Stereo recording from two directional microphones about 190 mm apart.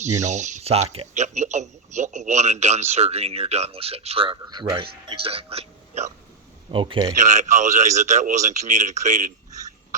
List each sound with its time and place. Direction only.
0.2 s a man's voice: 40° right (ahead or behind); by 7.2 s 20° right (ahead or behind)
7.2 s a man's voice: 40° right (ahead or behind)